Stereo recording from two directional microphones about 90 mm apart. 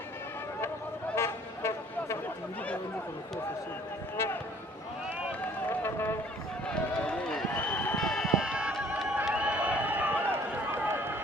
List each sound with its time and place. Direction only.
1.1 s vehicle: 30° left (ahead or behind)
4.2 s a sound: 25° left (ahead or behind)
5.4 s run: 25° left (ahead or behind)
6.7 s run: 10° left (ahead or behind)
7.9 s a sound: 5° left (ahead or behind)
9.2 s run: 15° right (ahead or behind)